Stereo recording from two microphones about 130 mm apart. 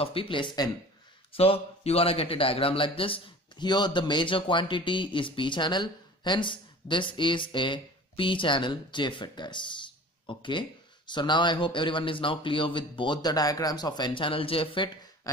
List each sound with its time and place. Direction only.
0.0 s a man's voice: 45° left (ahead or behind)